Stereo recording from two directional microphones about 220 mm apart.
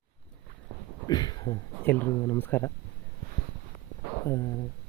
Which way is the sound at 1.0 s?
20° left (ahead or behind).